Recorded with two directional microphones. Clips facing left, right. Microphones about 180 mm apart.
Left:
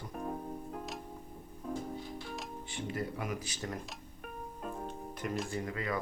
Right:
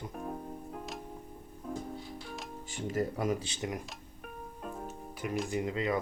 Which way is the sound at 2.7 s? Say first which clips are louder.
Right 5 dB; 40° right (ahead or behind).